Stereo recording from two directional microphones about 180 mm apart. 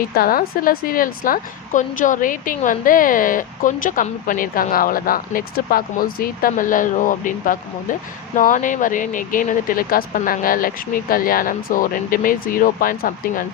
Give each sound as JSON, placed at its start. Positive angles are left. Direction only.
{"t": 0.2, "sound": "a woman's voice", "side_deg": 55}